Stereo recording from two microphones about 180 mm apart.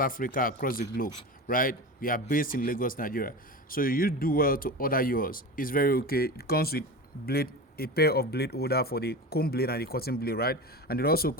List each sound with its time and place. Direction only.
0.0 s a man's voice: 50° left (ahead or behind)